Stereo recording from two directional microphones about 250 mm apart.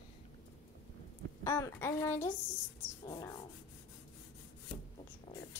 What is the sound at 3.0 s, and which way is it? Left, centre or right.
Rub, centre.